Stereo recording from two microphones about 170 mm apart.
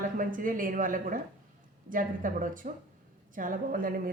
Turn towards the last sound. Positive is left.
turn(degrees=-55)  # may be behind; listen again after turning